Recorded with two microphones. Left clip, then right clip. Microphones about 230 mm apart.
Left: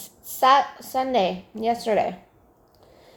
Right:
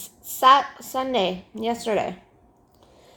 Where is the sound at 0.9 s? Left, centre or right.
Right.